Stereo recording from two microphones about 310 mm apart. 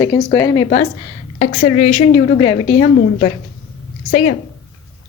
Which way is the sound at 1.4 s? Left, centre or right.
Left.